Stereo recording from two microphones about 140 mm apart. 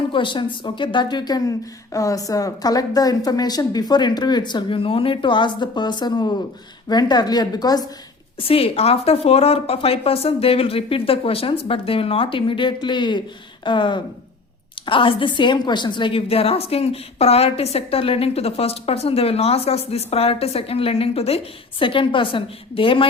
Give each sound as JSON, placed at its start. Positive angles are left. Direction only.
{"t": 0.1, "sound": "a woman's voice", "side_deg": 35}
{"t": 8.4, "sound": "a woman's voice", "side_deg": 45}